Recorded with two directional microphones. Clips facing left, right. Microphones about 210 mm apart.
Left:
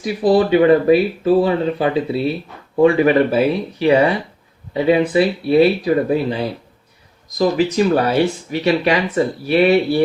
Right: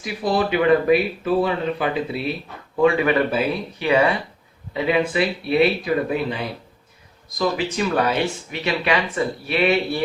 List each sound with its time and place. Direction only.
0.0 s speech: 30° left (ahead or behind)